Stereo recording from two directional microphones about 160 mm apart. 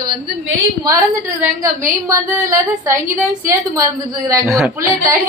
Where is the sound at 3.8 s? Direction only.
20° right (ahead or behind).